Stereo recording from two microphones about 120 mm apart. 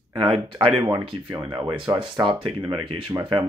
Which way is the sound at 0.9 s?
30° right (ahead or behind).